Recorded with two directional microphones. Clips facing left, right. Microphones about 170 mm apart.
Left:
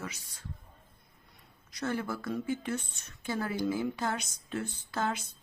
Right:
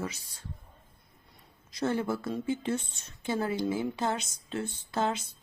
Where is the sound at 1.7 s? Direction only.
25° right (ahead or behind).